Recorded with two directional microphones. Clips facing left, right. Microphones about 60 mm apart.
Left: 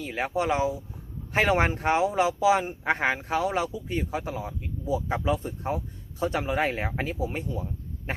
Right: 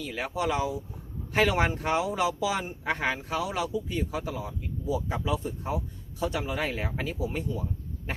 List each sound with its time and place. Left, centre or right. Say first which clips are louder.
0.0 s speech: left 3 dB; left